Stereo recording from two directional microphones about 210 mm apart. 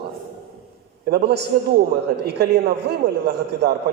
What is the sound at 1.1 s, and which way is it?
A man's voice, 50° right (ahead or behind).